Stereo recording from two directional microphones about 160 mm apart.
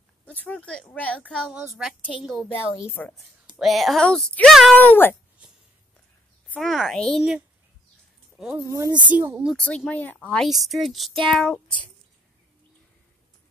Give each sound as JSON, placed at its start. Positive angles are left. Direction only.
{"t": 0.2, "sound": "a child's voice", "side_deg": 10}
{"t": 2.5, "sound": "a child's voice", "side_deg": 15}
{"t": 3.2, "sound": "speech", "side_deg": 0}
{"t": 4.7, "sound": "a child's voice", "side_deg": 10}
{"t": 6.5, "sound": "speech", "side_deg": 0}
{"t": 8.6, "sound": "speech", "side_deg": -20}
{"t": 9.1, "sound": "speech", "side_deg": -10}
{"t": 9.5, "sound": "speech", "side_deg": 5}